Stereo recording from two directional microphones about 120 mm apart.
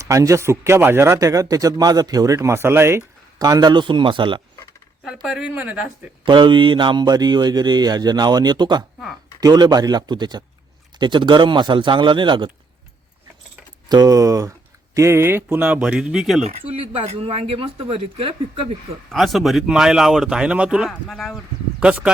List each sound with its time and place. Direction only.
0.0 s speech: 25° right (ahead or behind)
3.3 s speech: 35° right (ahead or behind)
5.0 s speech: 5° right (ahead or behind)
6.2 s speech: 40° right (ahead or behind)
13.8 s speech: 35° right (ahead or behind); by 16.4 s centre (ahead or behind)
16.4 s speech: 55° right (ahead or behind)
19.1 s speech: centre (ahead or behind)